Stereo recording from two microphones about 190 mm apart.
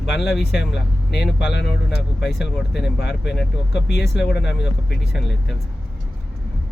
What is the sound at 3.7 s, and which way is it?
Speech, 60° left (ahead or behind).